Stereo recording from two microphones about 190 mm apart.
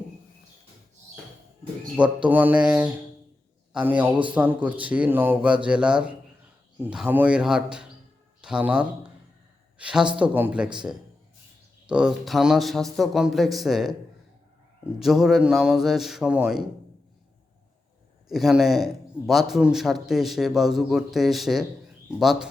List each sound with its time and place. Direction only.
2.0 s a man's voice: 10° right (ahead or behind)
11.9 s a man's voice: 5° right (ahead or behind)
14.9 s a man's voice: centre (ahead or behind)
18.3 s a man's voice: centre (ahead or behind)